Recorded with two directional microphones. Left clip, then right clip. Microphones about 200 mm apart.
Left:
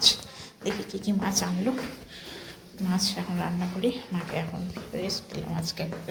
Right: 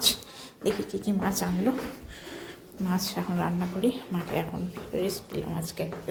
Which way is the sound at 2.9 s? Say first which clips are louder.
Left 2 dB; 25° right (ahead or behind).